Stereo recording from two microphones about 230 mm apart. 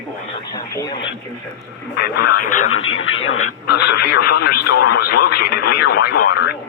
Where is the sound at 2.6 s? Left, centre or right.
Left.